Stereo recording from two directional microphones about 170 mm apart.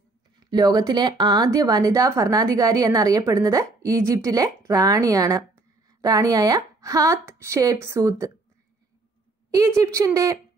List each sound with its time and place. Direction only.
0.5 s speech: 25° right (ahead or behind)
9.5 s speech: 20° right (ahead or behind)